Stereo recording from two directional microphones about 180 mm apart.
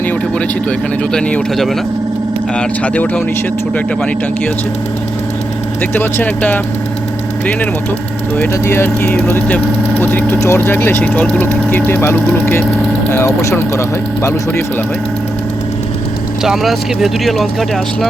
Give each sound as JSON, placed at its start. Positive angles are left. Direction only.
{"t": 1.1, "sound": "speech", "side_deg": 0}
{"t": 5.9, "sound": "speech", "side_deg": 10}
{"t": 8.4, "sound": "speech", "side_deg": 15}
{"t": 16.4, "sound": "speech", "side_deg": 0}